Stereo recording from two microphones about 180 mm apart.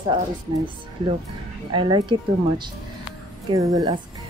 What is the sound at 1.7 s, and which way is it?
Speech, 25° right (ahead or behind).